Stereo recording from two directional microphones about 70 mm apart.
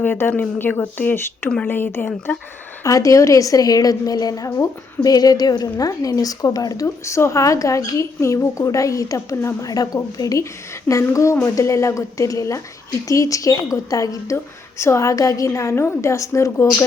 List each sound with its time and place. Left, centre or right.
0.0 s speech: left
2.8 s a woman's voice: left
5.0 s a woman's voice: left
6.8 s a woman's voice: left
9.6 s a woman's voice: left
14.3 s a woman's voice: left